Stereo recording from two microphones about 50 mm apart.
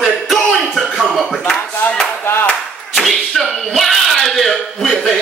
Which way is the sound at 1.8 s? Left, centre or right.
Left.